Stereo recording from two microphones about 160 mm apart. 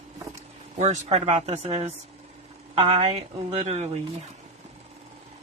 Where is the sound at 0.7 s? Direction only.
45° right (ahead or behind).